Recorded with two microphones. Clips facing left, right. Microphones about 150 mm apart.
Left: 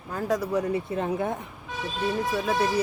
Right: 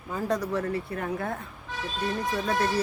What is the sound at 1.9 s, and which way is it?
Speech, 5° left (ahead or behind).